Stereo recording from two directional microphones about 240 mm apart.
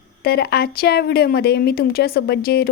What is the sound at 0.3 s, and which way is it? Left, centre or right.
A woman's voice, left.